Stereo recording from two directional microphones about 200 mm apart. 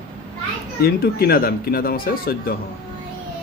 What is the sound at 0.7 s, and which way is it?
Speech, 50° left (ahead or behind).